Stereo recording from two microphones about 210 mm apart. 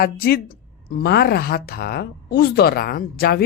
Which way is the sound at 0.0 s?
45° left (ahead or behind).